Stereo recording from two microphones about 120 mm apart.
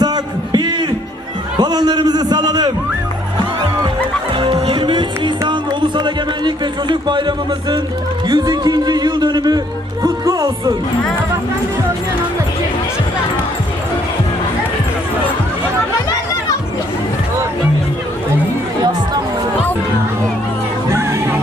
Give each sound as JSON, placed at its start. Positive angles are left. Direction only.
{"t": 0.0, "sound": "a sound", "side_deg": -35}
{"t": 1.5, "sound": "speech", "side_deg": -35}
{"t": 4.4, "sound": "music", "side_deg": -45}
{"t": 5.5, "sound": "speech", "side_deg": -40}
{"t": 10.0, "sound": "music", "side_deg": -30}
{"t": 20.9, "sound": "music", "side_deg": -25}